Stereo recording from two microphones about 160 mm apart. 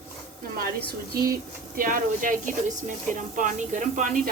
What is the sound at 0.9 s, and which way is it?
Speech, 70° right (ahead or behind).